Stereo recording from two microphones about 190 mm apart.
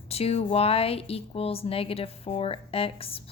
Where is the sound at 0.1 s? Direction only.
30° left (ahead or behind).